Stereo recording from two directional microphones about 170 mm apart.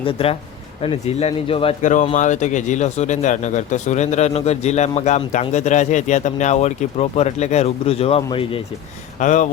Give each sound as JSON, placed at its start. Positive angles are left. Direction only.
{"t": 0.0, "sound": "speech", "side_deg": 35}
{"t": 1.8, "sound": "speech", "side_deg": 45}
{"t": 9.2, "sound": "speech", "side_deg": 45}